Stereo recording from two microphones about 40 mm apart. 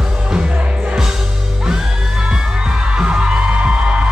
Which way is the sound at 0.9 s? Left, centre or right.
Centre.